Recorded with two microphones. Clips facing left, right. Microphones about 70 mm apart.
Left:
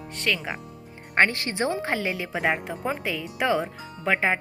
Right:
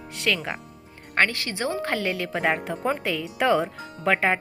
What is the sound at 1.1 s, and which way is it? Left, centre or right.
Speech, left.